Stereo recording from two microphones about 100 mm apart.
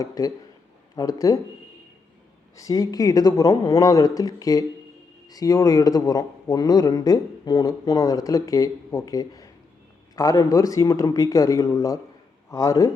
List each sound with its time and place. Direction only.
0.0 s speech: 35° left (ahead or behind)
2.6 s speech: 35° left (ahead or behind)